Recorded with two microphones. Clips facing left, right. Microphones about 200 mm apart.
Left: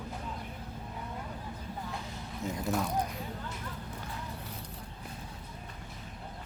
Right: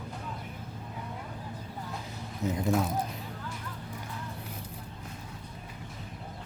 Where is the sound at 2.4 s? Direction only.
20° right (ahead or behind).